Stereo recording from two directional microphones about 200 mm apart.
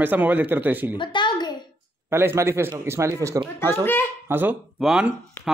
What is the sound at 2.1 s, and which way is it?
A man's voice, 10° right (ahead or behind).